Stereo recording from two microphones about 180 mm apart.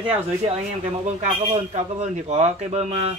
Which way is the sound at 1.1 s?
35° right (ahead or behind).